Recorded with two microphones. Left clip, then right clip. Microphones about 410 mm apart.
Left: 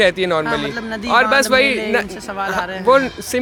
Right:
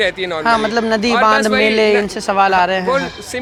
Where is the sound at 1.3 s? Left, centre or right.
Left.